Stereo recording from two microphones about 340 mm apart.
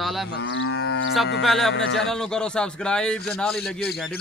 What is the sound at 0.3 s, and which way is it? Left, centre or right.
Livestock, left.